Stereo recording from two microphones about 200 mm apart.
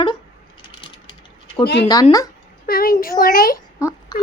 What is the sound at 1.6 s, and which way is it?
Speech, 55° left (ahead or behind).